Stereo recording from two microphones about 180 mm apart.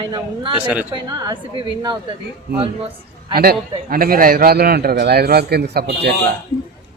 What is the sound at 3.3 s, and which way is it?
A man's voice, 55° right (ahead or behind).